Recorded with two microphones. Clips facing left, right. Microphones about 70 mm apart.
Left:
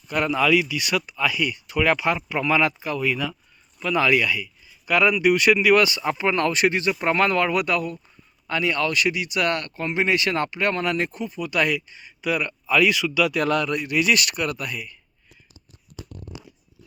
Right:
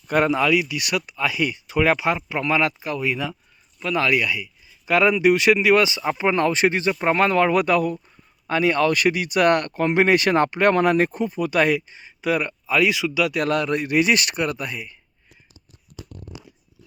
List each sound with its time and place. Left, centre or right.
0.3 s speech: centre
1.4 s speech: right
1.9 s speech: centre
3.1 s speech: centre
3.8 s speech: centre; by 6.9 s right
7.0 s speech: centre; by 7.9 s right
8.4 s speech: right
8.9 s speech: right
12.5 s speech: centre; by 14.9 s right